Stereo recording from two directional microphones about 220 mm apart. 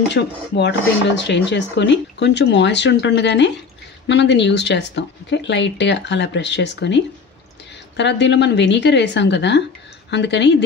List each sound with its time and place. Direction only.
0.1 s speech: 50° left (ahead or behind)
8.0 s speech: 50° left (ahead or behind)